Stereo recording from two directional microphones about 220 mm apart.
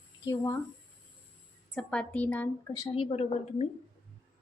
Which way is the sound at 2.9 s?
30° left (ahead or behind).